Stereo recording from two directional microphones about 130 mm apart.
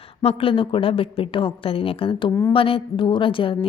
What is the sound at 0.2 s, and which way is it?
A woman's voice, 50° left (ahead or behind).